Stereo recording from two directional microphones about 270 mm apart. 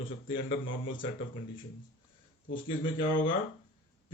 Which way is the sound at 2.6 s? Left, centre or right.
Centre.